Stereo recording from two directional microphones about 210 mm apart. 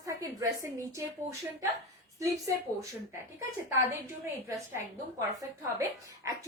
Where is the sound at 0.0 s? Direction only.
15° right (ahead or behind).